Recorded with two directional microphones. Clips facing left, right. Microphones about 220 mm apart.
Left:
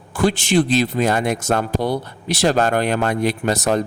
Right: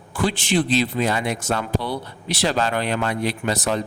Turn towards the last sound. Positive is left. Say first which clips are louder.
# left 4 dB
turn(degrees=45)  # may be behind; listen again after turning